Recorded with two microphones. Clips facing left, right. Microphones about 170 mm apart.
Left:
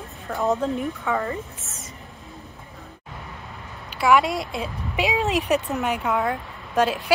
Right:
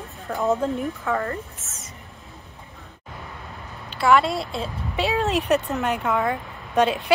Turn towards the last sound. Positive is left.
turn(degrees=0)  # may be behind; listen again after turning